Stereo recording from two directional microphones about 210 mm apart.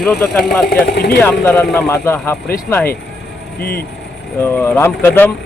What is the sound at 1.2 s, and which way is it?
Speech, 10° left (ahead or behind).